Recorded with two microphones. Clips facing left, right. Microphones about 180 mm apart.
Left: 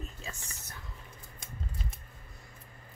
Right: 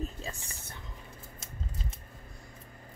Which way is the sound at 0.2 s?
35° right (ahead or behind).